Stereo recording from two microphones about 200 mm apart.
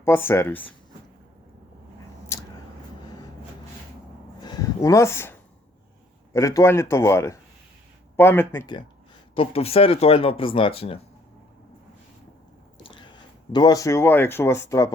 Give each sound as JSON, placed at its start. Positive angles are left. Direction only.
{"t": 0.0, "sound": "speech", "side_deg": 10}
{"t": 4.4, "sound": "a sound", "side_deg": 20}
{"t": 6.3, "sound": "speech", "side_deg": 15}
{"t": 9.3, "sound": "speech", "side_deg": 30}
{"t": 12.8, "sound": "biting", "side_deg": 25}
{"t": 13.5, "sound": "speech", "side_deg": 20}